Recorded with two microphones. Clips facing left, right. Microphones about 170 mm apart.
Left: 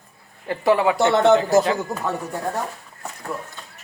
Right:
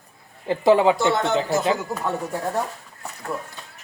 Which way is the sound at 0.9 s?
65° left (ahead or behind).